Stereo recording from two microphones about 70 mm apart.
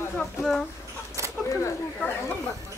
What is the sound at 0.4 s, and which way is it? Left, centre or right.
Speech, centre.